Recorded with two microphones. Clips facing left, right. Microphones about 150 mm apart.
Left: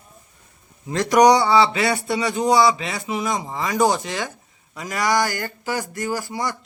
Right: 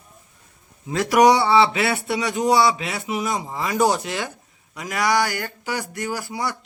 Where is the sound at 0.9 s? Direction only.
5° right (ahead or behind).